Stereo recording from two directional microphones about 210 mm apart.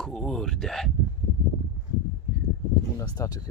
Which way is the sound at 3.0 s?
15° left (ahead or behind).